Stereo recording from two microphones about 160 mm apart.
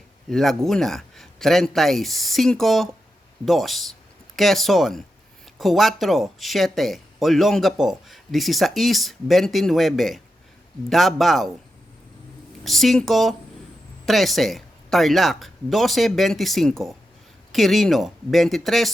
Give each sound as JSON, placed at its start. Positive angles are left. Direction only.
{"t": 0.3, "sound": "speech", "side_deg": 0}
{"t": 12.6, "sound": "speech", "side_deg": 0}